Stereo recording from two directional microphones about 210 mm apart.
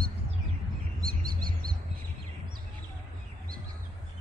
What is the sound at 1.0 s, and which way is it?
Bird vocalization, 45° right (ahead or behind).